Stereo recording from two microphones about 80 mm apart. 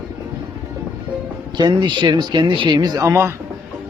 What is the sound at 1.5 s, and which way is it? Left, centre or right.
Speech, right.